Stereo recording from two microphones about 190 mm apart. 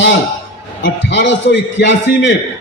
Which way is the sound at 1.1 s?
65° left (ahead or behind).